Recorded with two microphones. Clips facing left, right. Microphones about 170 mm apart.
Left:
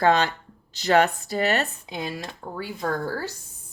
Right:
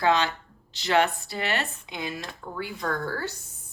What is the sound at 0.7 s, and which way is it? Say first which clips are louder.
Speech: left 3 dB; 40° left (ahead or behind).